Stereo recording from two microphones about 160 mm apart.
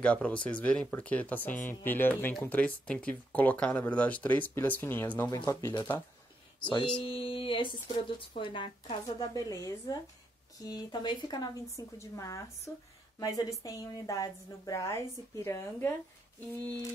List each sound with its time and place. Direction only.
0.0 s speech: 10° left (ahead or behind)
5.3 s a woman's voice: 20° left (ahead or behind)